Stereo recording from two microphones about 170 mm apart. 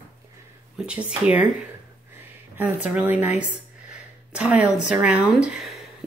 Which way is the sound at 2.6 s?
10° right (ahead or behind).